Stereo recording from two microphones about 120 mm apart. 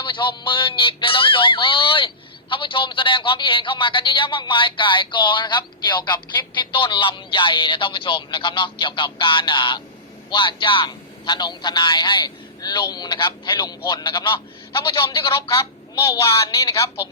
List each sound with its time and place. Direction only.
0.0 s music: 40° left (ahead or behind)
6.6 s speech: 40° left (ahead or behind)
14.8 s music: 45° left (ahead or behind)
15.3 s a woman's voice: 25° left (ahead or behind)